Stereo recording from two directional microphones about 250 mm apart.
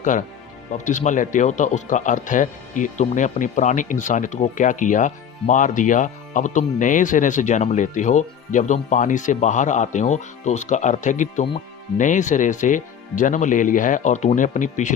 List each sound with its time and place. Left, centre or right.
0.0 s speech: left